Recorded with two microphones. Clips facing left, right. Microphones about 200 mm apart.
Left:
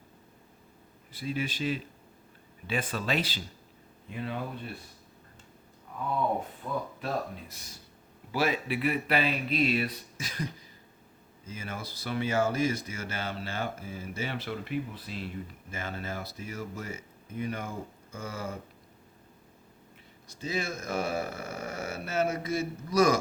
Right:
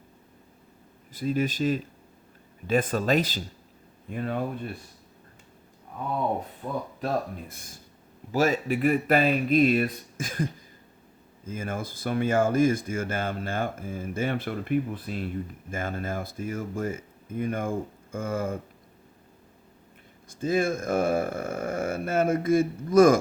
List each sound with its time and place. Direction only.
1.1 s speech: 45° right (ahead or behind)
6.6 s speech: 40° right (ahead or behind)
7.0 s speech: 50° right (ahead or behind)
20.2 s speech: 50° right (ahead or behind)